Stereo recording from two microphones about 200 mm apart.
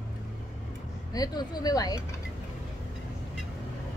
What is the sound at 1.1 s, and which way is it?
Speech, 20° left (ahead or behind).